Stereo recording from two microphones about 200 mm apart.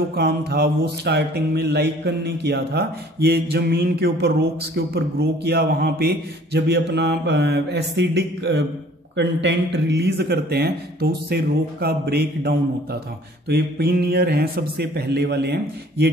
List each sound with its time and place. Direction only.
0.1 s mantra: 50° right (ahead or behind)
4.7 s a man's voice: 55° right (ahead or behind)
13.5 s mantra: 50° right (ahead or behind)